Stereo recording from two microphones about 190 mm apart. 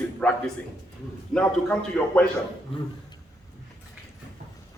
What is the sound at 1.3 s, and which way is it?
Speech, 10° left (ahead or behind).